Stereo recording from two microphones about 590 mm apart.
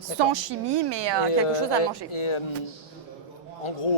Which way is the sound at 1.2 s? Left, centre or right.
Left.